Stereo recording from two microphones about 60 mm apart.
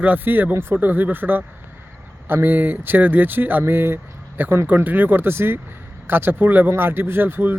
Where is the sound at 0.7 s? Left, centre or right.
Right.